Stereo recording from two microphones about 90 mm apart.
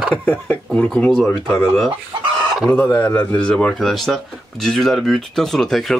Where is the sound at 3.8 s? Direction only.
Centre (ahead or behind).